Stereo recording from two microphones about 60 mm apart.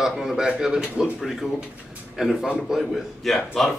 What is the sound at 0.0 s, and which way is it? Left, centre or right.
A man's voice, centre.